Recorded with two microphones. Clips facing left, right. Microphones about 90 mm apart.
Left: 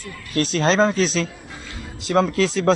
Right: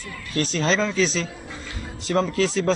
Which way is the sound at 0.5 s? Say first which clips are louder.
Left 5 dB; 55° left (ahead or behind).